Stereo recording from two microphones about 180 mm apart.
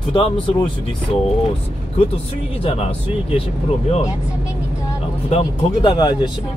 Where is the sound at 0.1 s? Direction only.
30° left (ahead or behind).